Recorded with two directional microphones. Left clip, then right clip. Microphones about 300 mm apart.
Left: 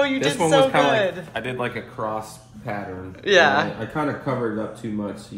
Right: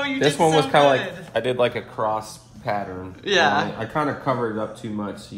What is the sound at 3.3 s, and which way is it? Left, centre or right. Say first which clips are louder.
Speech: left 2 dB; centre.